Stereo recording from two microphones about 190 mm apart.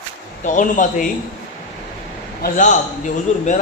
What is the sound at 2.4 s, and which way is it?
A man's voice, 40° left (ahead or behind).